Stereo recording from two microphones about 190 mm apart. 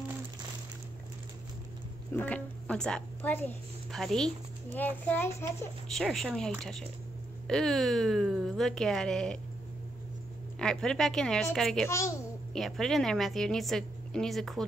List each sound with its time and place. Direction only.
2.1 s a woman's voice: 5° left (ahead or behind)
10.6 s speech: 5° left (ahead or behind)
11.9 s a child's voice: 15° left (ahead or behind)
12.5 s speech: centre (ahead or behind)